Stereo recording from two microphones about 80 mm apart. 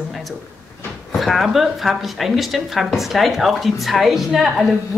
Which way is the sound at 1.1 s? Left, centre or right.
Centre.